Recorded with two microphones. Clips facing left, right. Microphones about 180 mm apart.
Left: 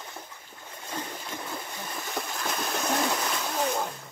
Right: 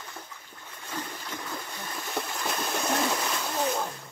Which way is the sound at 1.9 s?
Centre (ahead or behind).